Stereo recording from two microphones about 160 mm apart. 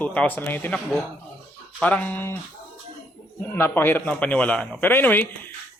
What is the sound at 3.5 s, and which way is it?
Speech, 15° left (ahead or behind).